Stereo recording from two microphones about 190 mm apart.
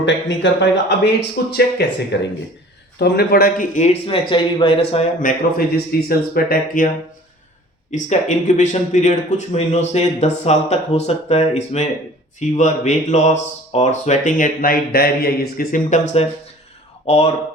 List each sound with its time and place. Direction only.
0.0 s speech: 70° left (ahead or behind)
3.0 s speech: 55° left (ahead or behind); by 5.0 s 30° left (ahead or behind)
5.2 s speech: 50° left (ahead or behind)
8.1 s speech: 40° left (ahead or behind)